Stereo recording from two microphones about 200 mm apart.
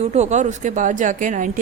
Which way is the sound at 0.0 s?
35° right (ahead or behind).